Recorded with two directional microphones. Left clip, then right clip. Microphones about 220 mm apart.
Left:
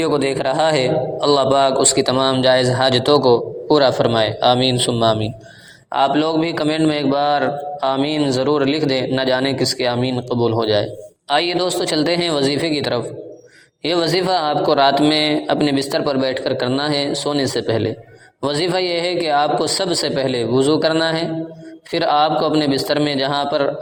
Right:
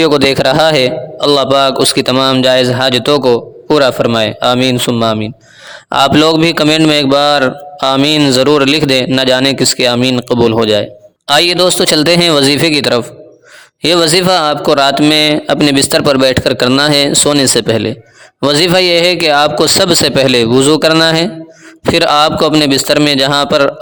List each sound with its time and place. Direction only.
0.0 s a man's voice: 45° right (ahead or behind)